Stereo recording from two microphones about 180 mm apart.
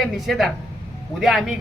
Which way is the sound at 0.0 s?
Centre (ahead or behind).